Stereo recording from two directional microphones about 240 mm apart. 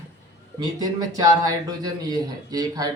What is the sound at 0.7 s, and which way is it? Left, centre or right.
A man's voice, centre.